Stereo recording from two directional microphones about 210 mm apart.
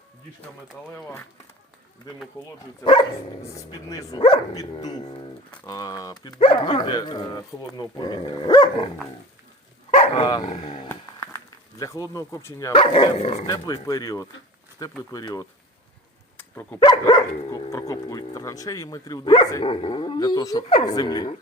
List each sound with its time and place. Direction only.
0.9 s speech: 10° left (ahead or behind)
2.8 s speech: 20° left (ahead or behind)
9.9 s speech: 25° left (ahead or behind)
12.7 s speech: 25° left (ahead or behind)
16.8 s speech: 20° left (ahead or behind)